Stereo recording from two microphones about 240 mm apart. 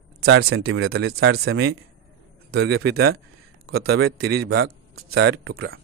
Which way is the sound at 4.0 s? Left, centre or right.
Right.